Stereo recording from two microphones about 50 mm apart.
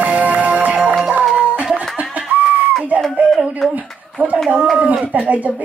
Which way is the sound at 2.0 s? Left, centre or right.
Right.